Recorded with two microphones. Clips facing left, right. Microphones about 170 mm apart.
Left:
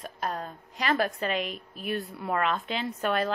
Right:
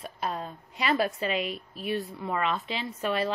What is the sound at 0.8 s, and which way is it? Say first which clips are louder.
Speech: even; 45° left (ahead or behind).